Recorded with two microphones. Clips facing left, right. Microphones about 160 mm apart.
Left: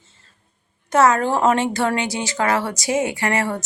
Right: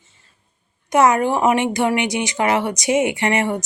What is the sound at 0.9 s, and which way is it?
Speech, 15° right (ahead or behind).